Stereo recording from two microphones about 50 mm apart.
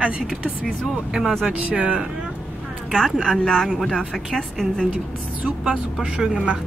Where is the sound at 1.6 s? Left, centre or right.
Right.